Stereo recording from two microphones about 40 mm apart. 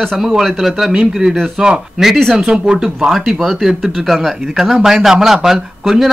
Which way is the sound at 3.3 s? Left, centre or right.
Centre.